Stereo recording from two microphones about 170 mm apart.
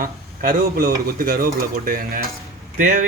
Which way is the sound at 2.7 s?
50° right (ahead or behind).